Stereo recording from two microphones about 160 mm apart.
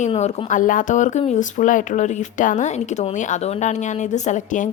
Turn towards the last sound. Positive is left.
turn(degrees=50)  # may be behind; listen again after turning